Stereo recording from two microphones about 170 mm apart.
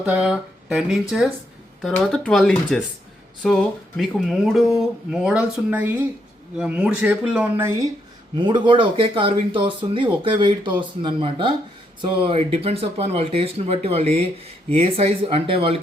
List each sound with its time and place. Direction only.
0.0 s a man's voice: 5° right (ahead or behind)
8.4 s speech: 25° right (ahead or behind)